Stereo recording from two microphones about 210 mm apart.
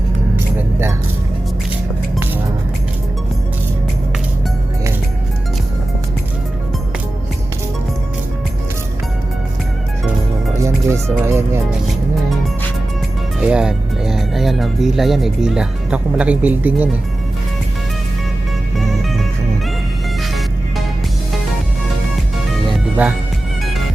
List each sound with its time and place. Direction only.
10.8 s speech: 10° right (ahead or behind)
13.4 s speech: 5° right (ahead or behind)
18.8 s music: centre (ahead or behind)
22.7 s music: 5° right (ahead or behind)